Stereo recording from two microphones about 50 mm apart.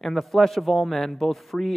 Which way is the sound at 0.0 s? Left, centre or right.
Centre.